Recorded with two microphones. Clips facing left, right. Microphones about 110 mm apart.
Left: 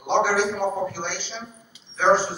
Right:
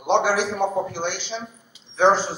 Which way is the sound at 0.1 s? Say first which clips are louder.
Right 1 dB; 20° right (ahead or behind).